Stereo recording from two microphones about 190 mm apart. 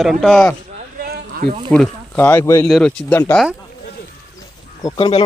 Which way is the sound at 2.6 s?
Centre (ahead or behind).